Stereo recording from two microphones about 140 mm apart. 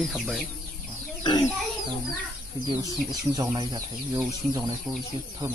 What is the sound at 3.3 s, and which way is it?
Speech, 30° right (ahead or behind).